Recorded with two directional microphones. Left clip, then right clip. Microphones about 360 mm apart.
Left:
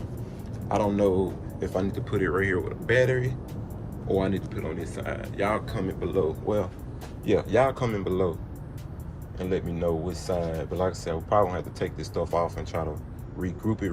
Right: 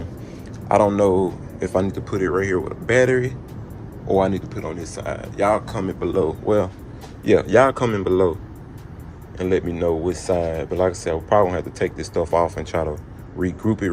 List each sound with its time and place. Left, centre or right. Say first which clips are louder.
0.7 s speech: right 8 dB; centre
9.4 s speech: right 8 dB; right